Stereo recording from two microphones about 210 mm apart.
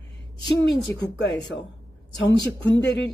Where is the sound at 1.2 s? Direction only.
60° left (ahead or behind).